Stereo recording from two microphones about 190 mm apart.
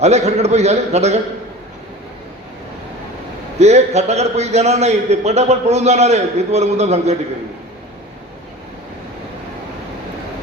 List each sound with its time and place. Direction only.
0.0 s a man's voice: 35° right (ahead or behind)
3.6 s a man's voice: 35° right (ahead or behind)